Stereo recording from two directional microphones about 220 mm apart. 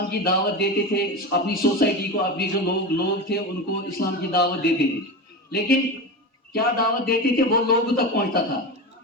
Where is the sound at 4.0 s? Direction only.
45° left (ahead or behind).